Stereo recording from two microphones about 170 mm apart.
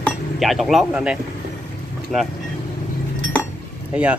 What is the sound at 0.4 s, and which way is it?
Speech, centre (ahead or behind).